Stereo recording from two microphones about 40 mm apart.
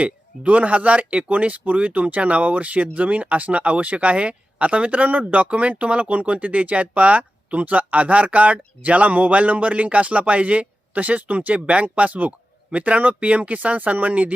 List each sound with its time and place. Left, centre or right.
0.0 s speech: right